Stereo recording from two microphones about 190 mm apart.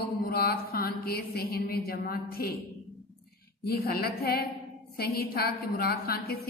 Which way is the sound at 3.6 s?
50° left (ahead or behind).